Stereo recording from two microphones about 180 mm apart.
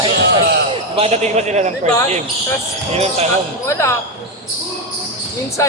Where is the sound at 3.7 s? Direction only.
15° left (ahead or behind).